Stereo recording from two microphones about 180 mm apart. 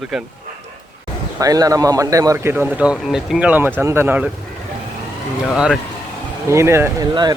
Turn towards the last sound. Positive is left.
turn(degrees=-25)  # may be behind; listen again after turning